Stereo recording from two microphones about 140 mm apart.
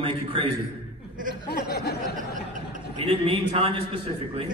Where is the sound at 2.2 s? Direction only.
70° right (ahead or behind).